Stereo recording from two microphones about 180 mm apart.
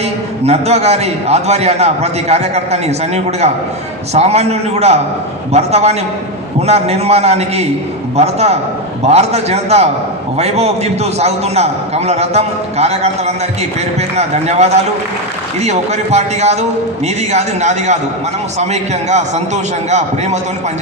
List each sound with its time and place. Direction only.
0.4 s a man's voice: 35° right (ahead or behind)
4.1 s a man's voice: 35° right (ahead or behind)